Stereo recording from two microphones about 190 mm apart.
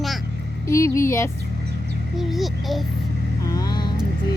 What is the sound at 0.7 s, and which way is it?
Speech, 15° left (ahead or behind).